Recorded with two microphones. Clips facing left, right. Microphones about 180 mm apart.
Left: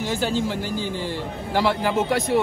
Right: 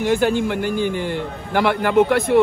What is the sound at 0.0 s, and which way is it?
A man's voice, 55° right (ahead or behind).